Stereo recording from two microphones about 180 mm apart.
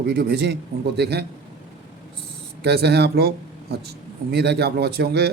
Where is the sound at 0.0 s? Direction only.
60° right (ahead or behind).